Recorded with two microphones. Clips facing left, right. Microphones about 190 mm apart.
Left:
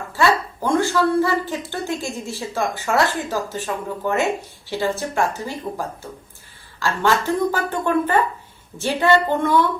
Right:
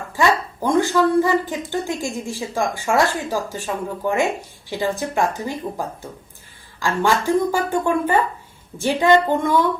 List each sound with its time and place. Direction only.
0.1 s a woman's voice: 15° right (ahead or behind)